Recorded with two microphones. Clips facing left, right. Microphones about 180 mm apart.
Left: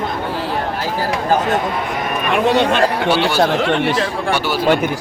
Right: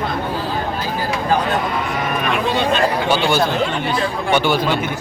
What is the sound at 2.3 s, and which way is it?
Speech, 65° left (ahead or behind).